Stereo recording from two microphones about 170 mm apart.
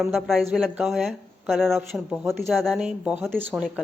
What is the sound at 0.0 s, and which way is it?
Speech, centre (ahead or behind).